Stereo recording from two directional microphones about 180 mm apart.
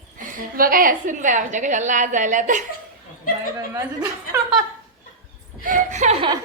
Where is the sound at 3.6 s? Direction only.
20° right (ahead or behind).